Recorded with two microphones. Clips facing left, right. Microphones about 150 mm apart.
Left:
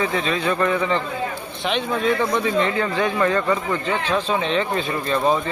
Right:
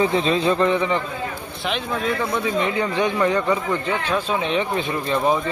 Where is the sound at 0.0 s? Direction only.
30° right (ahead or behind).